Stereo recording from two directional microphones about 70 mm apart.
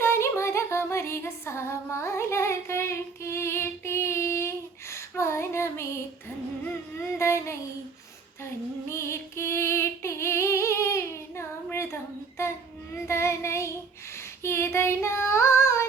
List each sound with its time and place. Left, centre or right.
0.0 s female singing: left
7.2 s female singing: left
8.9 s music: left
13.1 s female singing: left